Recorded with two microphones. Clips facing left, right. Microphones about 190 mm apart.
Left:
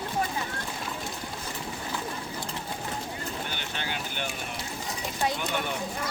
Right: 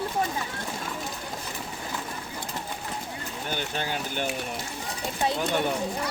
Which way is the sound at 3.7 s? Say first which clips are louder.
Right 4 dB; 40° right (ahead or behind).